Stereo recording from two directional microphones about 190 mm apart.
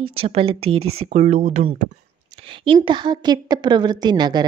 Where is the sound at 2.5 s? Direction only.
25° right (ahead or behind).